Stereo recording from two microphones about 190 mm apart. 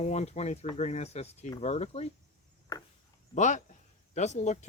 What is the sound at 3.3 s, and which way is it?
Speech, 40° left (ahead or behind).